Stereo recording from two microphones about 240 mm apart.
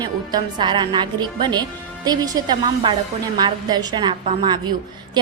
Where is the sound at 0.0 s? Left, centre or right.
Centre.